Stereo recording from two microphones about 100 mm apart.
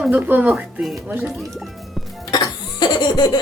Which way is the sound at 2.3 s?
45° left (ahead or behind).